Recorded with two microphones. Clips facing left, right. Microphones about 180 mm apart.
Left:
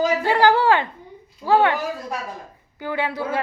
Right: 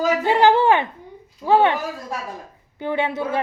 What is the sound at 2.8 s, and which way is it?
Speech, 25° right (ahead or behind).